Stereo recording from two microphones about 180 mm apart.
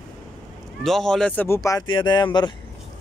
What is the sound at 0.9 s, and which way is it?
Speech, centre (ahead or behind).